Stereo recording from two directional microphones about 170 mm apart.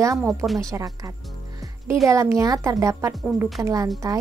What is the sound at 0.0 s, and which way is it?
Speech, 20° right (ahead or behind).